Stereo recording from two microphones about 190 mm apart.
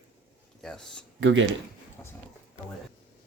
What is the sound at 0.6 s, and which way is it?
Speech, 5° left (ahead or behind).